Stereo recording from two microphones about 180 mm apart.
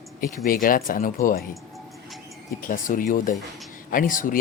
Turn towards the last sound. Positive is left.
turn(degrees=45)  # may be behind; listen again after turning